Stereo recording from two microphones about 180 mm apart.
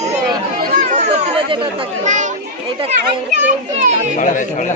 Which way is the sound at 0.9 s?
35° right (ahead or behind).